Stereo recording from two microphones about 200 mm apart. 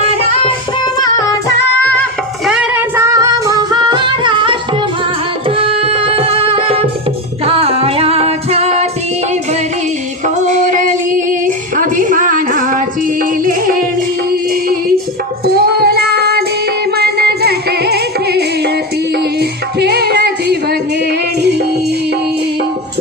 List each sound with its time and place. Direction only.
1.2 s singing: 15° left (ahead or behind)
2.5 s music: 5° right (ahead or behind); by 8.9 s 35° right (ahead or behind)
10.2 s female singing: 35° right (ahead or behind)
13.4 s music: 45° right (ahead or behind)
15.4 s child singing: 50° right (ahead or behind)
16.9 s music: 50° right (ahead or behind)